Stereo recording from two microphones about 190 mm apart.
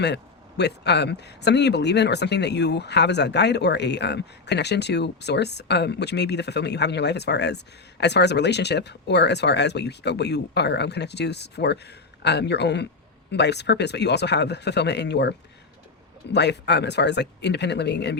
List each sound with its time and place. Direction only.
0.0 s speech: 65° left (ahead or behind)